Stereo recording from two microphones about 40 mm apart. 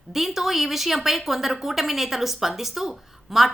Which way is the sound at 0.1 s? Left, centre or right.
Centre.